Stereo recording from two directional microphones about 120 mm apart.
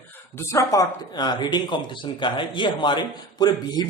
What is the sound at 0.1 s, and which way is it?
Speech, 20° left (ahead or behind).